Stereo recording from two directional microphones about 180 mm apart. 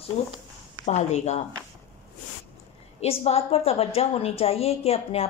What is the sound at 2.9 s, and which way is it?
Speech, 35° left (ahead or behind).